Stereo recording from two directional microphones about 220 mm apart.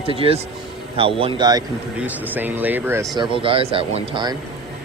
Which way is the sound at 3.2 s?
25° right (ahead or behind).